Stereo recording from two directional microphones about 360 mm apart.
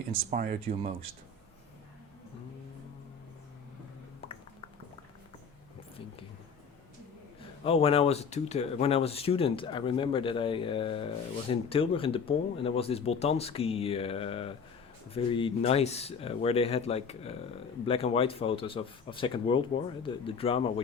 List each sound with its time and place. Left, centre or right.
0.1 s speech: right
7.6 s speech: centre